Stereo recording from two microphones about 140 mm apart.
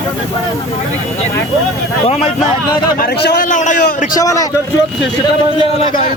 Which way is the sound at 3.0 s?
80° left.